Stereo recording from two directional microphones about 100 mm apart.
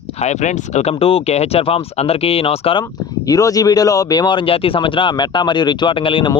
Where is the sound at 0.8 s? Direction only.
75° left (ahead or behind).